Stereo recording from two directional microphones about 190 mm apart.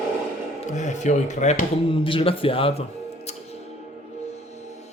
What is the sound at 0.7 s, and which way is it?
Speech, 40° left (ahead or behind).